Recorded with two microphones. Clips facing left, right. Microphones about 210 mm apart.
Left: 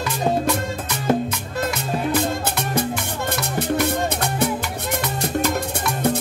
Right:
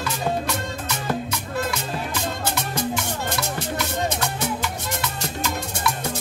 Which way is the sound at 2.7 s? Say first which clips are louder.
Left 3 dB; 60° left (ahead or behind).